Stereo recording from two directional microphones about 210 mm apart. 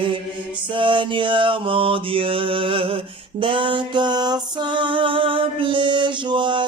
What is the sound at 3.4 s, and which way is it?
Music, 25° right (ahead or behind).